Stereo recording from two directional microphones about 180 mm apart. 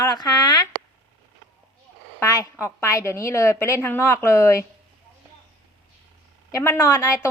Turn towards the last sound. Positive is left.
turn(degrees=15)  # may be behind; listen again after turning